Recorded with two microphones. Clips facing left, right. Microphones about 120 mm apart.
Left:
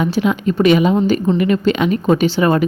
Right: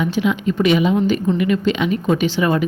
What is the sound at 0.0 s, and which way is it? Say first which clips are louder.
A woman's voice: left 2 dB; 45° left (ahead or behind).